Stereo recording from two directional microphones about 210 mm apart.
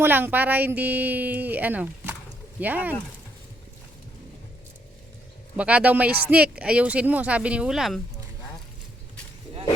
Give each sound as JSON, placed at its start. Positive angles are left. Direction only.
{"t": 0.0, "sound": "speech", "side_deg": -10}
{"t": 5.5, "sound": "speech", "side_deg": -5}